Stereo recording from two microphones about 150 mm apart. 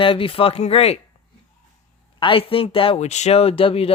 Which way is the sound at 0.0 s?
35° left (ahead or behind).